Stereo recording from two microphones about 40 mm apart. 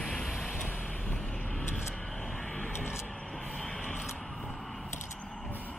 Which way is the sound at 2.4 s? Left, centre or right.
Left.